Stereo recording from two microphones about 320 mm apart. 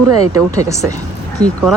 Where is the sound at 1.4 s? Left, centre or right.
Centre.